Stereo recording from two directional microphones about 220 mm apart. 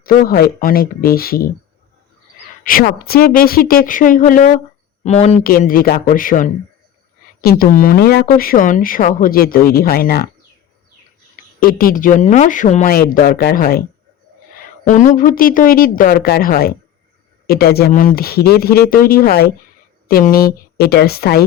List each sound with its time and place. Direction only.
0.0 s speech: 40° left (ahead or behind)
2.6 s speech: 40° left (ahead or behind)
5.4 s speech: 40° left (ahead or behind)
11.6 s speech: 40° left (ahead or behind)